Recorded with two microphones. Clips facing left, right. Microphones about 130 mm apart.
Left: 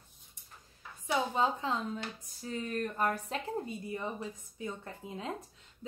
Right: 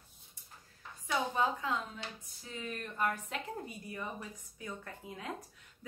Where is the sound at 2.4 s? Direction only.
40° left (ahead or behind).